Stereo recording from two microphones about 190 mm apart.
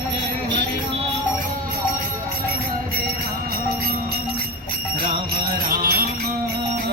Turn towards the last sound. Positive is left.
turn(degrees=-50)  # may be behind; listen again after turning